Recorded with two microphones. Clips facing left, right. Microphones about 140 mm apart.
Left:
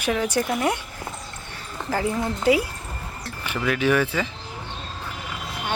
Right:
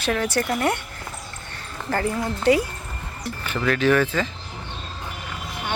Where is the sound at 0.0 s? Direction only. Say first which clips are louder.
Even; 10° left (ahead or behind).